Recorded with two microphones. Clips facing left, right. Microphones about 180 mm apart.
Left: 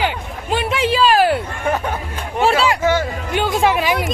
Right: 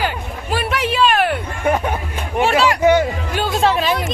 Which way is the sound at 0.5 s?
25° left (ahead or behind).